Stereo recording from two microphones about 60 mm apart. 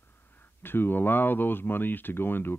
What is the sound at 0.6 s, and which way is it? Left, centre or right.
Speech, left.